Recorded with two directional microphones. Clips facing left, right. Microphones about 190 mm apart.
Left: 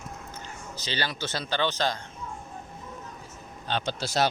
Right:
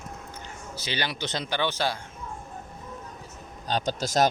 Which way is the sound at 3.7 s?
40° right (ahead or behind).